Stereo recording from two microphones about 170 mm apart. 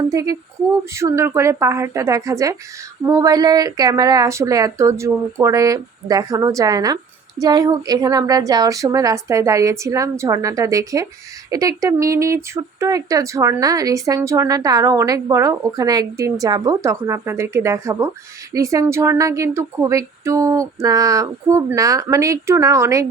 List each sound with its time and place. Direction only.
0.1 s speech: 20° right (ahead or behind)